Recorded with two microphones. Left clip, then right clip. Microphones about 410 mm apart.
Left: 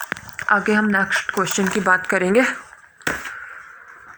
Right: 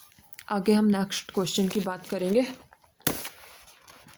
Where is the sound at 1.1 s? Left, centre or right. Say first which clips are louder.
Left 9 dB; right.